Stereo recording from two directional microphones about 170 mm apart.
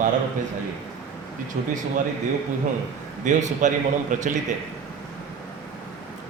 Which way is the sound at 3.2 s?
45° right (ahead or behind).